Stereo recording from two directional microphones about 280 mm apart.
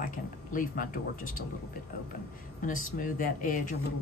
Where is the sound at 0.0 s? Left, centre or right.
Left.